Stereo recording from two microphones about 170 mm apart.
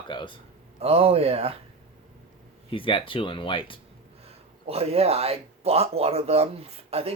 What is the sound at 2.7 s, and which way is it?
Speech, 30° left (ahead or behind).